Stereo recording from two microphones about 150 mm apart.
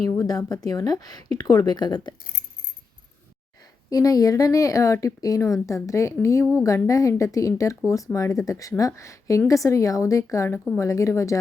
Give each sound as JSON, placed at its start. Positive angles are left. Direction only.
{"t": 0.0, "sound": "a woman's voice", "side_deg": 25}
{"t": 3.8, "sound": "a woman's voice", "side_deg": 25}